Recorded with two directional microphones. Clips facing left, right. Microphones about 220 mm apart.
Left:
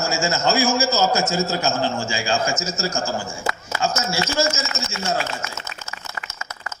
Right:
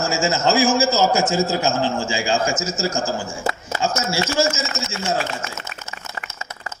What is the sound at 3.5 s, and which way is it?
Speech, 30° right (ahead or behind).